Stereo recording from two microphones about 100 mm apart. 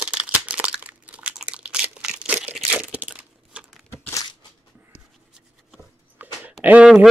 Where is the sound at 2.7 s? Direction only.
15° right (ahead or behind).